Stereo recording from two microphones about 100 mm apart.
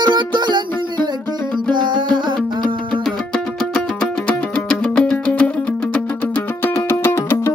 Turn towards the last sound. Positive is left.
turn(degrees=25)  # may be behind; listen again after turning